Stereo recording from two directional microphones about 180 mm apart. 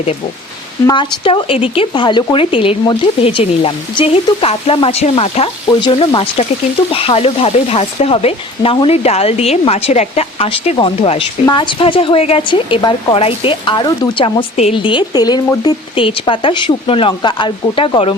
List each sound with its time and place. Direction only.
0.9 s speech: 30° left (ahead or behind)